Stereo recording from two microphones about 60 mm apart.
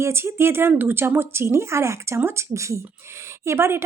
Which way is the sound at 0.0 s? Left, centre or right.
Right.